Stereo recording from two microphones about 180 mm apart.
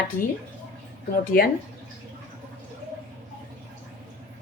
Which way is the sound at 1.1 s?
55° left (ahead or behind).